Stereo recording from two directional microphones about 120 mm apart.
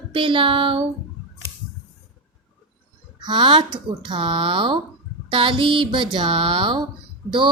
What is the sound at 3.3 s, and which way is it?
Speech, 40° right (ahead or behind).